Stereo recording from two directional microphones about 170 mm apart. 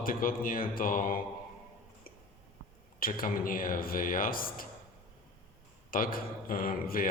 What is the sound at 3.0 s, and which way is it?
Speech, 55° left (ahead or behind).